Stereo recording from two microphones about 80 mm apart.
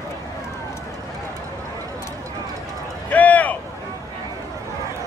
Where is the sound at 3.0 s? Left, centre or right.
Centre.